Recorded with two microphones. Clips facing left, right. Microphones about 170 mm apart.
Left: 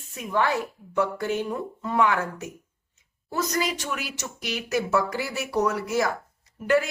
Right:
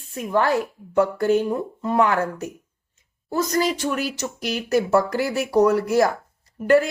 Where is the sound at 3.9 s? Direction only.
40° right (ahead or behind).